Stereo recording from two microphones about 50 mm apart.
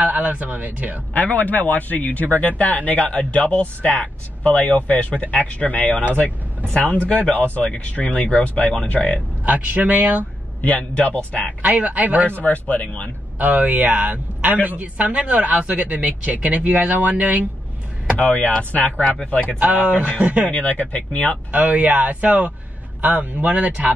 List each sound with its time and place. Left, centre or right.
0.0 s speech: right
1.1 s speech: left
7.3 s speech: left
9.5 s a man's voice: right
10.6 s speech: left
11.6 s a man's voice: right
12.3 s speech: left
13.4 s a man's voice: right
18.2 s speech: left
19.6 s a man's voice: right
20.4 s speech: left
21.5 s a man's voice: right